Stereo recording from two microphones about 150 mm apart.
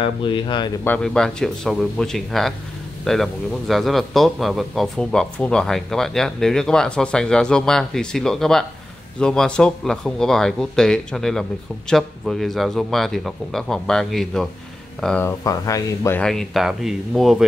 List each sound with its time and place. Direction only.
0.0 s speech: 35° left (ahead or behind)
0.8 s a man's voice: 5° left (ahead or behind)
15.2 s speech: 20° left (ahead or behind)
16.2 s a man's voice: 5° left (ahead or behind)